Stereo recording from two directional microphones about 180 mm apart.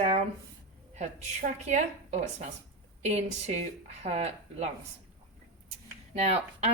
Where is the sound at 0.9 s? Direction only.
40° right (ahead or behind).